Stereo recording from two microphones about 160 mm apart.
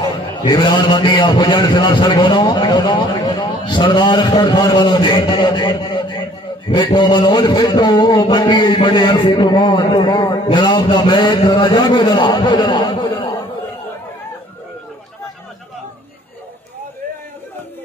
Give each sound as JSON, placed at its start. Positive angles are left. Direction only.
{"t": 0.0, "sound": "a man's voice", "side_deg": 25}